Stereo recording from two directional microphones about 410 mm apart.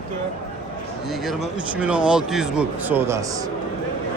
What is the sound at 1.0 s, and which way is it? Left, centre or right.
A man's voice, centre.